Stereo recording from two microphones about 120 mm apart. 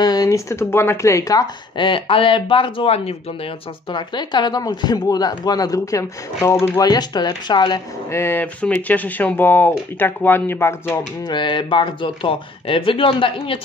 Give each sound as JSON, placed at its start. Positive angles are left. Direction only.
{"t": 0.0, "sound": "speech", "side_deg": 30}
{"t": 1.8, "sound": "speech", "side_deg": 45}
{"t": 3.9, "sound": "speech", "side_deg": 35}
{"t": 8.1, "sound": "speech", "side_deg": 20}
{"t": 11.2, "sound": "speech", "side_deg": 40}